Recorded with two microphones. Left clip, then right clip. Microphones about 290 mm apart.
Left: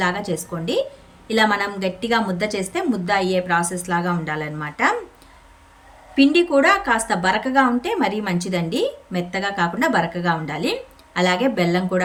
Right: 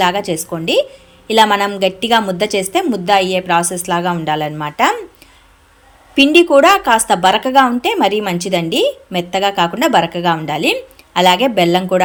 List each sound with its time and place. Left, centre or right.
0.0 s a woman's voice: centre
6.1 s a woman's voice: centre